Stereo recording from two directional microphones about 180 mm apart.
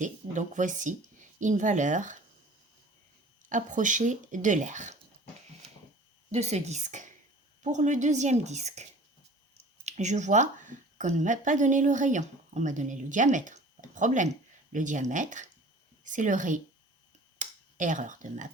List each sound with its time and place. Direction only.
0.0 s speech: 45° right (ahead or behind)
3.5 s speech: 45° right (ahead or behind)
6.3 s a woman's voice: 40° right (ahead or behind)
17.3 s finger snapping: 45° right (ahead or behind)